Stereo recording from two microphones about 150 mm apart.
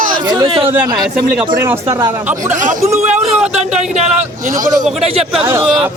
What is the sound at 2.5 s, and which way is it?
A man's voice, 60° right (ahead or behind).